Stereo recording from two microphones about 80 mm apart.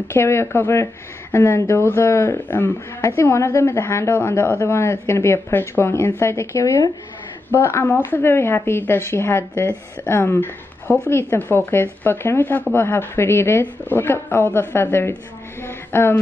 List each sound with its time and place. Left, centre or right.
0.1 s speech: left
7.5 s speech: left
15.6 s a sound: left